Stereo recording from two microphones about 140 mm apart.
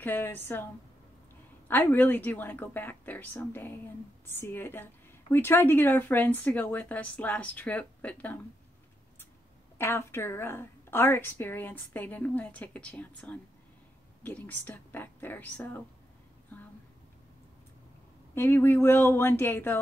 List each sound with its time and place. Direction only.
0.0 s a woman's voice: 15° left (ahead or behind)
1.7 s a woman's voice: 15° left (ahead or behind)
9.8 s a woman's voice: 15° left (ahead or behind)
18.3 s a woman's voice: 15° left (ahead or behind)